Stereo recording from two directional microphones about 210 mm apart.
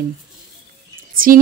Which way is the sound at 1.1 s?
40° right (ahead or behind).